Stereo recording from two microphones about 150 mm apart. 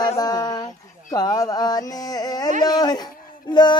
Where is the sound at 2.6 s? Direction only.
30° left (ahead or behind).